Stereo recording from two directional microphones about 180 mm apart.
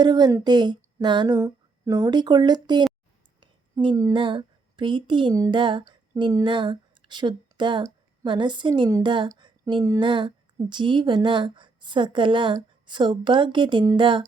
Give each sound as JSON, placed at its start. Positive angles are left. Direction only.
{"t": 0.0, "sound": "a woman's voice", "side_deg": -25}